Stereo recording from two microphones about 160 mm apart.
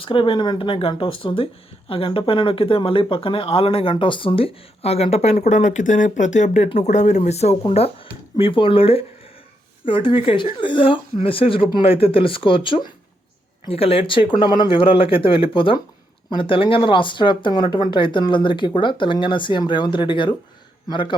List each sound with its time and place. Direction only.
0.0 s speech: 35° left (ahead or behind)